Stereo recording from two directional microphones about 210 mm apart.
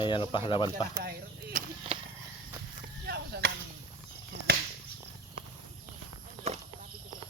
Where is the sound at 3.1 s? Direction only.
50° right (ahead or behind).